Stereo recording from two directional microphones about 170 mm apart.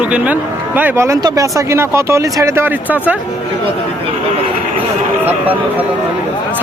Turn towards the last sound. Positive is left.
turn(degrees=-10)  # may be behind; listen again after turning